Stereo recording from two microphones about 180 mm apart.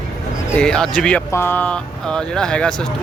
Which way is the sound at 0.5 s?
5° left (ahead or behind).